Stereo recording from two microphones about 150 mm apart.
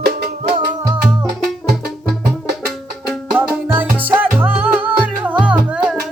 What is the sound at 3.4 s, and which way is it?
Music, 10° right (ahead or behind).